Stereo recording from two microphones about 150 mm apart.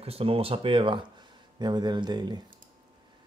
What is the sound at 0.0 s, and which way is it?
Speech, 40° right (ahead or behind).